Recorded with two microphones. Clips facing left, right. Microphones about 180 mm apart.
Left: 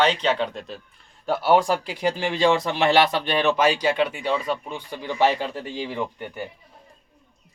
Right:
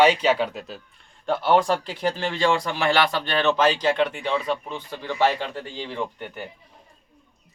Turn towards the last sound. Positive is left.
turn(degrees=10)  # may be behind; listen again after turning